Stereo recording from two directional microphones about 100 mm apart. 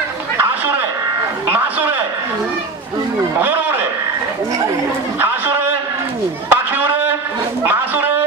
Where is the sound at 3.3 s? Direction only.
20° right (ahead or behind).